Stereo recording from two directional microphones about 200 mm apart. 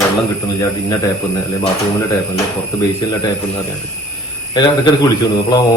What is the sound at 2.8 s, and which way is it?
Speech, 20° left (ahead or behind).